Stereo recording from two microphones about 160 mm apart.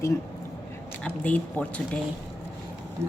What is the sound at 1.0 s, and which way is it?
Speech, 10° left (ahead or behind).